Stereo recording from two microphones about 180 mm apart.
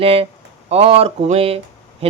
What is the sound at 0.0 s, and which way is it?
Speech, 30° right (ahead or behind).